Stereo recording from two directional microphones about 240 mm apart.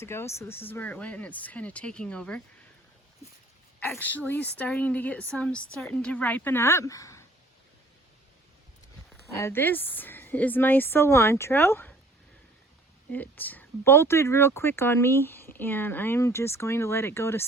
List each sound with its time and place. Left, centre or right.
0.0 s speech: centre
3.8 s speech: centre
9.4 s speech: centre
13.1 s speech: centre